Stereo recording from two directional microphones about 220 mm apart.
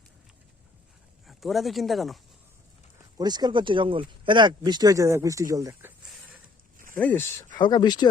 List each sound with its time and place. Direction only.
1.3 s speech: centre (ahead or behind)
3.2 s speech: 20° right (ahead or behind)
6.9 s speech: 10° left (ahead or behind)
7.5 s speech: 20° left (ahead or behind)